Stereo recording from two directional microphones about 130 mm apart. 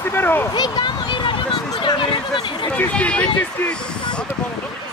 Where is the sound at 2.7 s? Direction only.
10° left (ahead or behind).